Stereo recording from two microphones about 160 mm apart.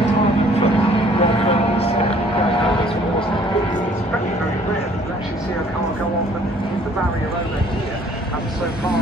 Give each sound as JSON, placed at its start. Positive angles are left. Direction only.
{"t": 0.9, "sound": "vehicle", "side_deg": 35}